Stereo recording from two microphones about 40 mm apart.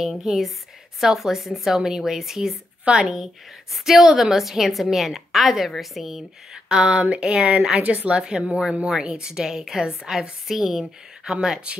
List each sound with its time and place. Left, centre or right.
0.2 s a woman's voice: centre
2.8 s a woman's voice: right
3.7 s a woman's voice: centre
6.5 s a sound: right
7.8 s a woman's voice: right
8.2 s a sound: right
8.8 s a woman's voice: centre